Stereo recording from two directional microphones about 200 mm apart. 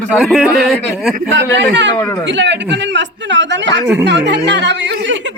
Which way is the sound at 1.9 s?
15° left (ahead or behind).